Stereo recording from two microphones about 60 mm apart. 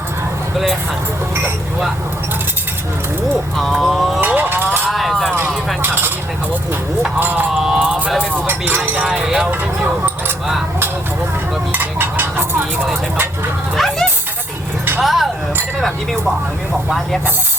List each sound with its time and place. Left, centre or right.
3.8 s speech: centre
4.4 s a sound: right
4.9 s a sound: centre
5.8 s cutlery: right
7.2 s speech: right
7.5 s clip-clop: centre
7.8 s a sound: right
8.4 s vehicle: right
9.2 s speech: centre
9.5 s speech: right
11.7 s speech: right
13.7 s speech: centre
16.7 s speech: centre